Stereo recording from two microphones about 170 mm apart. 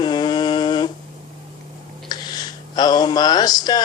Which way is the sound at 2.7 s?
25° left (ahead or behind).